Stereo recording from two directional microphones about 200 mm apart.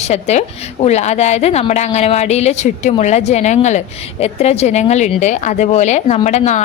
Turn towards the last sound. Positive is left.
turn(degrees=35)  # may be behind; listen again after turning